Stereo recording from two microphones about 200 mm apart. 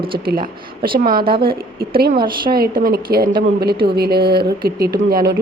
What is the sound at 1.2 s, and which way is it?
Speech, 25° right (ahead or behind).